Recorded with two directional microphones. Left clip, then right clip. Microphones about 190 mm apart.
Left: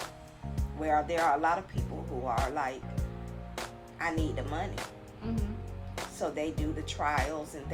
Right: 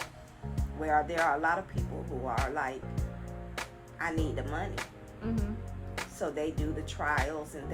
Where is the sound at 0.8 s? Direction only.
25° left (ahead or behind).